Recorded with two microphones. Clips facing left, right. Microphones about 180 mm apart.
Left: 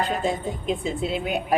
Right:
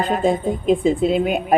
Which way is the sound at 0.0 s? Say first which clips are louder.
Right 6 dB; 50° right (ahead or behind).